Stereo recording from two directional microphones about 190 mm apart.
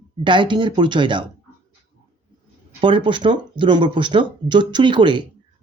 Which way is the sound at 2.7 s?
25° right (ahead or behind).